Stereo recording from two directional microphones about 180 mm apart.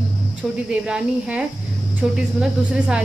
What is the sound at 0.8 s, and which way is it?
Speech, 5° right (ahead or behind).